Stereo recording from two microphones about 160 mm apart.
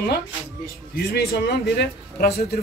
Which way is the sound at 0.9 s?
85° left.